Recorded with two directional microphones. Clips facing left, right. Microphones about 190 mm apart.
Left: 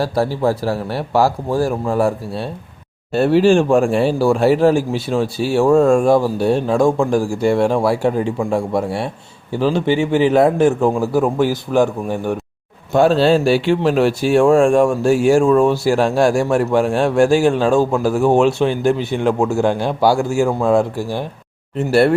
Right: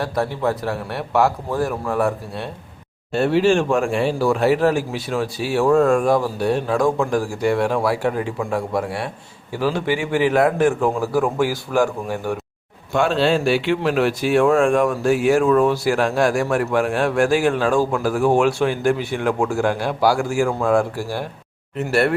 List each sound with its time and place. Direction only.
0.0 s speech: 30° left (ahead or behind)
12.9 s speech: 35° left (ahead or behind)